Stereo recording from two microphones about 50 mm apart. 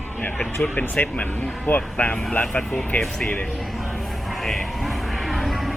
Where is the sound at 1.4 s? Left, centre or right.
Left.